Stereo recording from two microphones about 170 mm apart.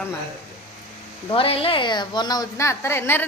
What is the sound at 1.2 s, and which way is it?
A woman's voice, 35° left (ahead or behind).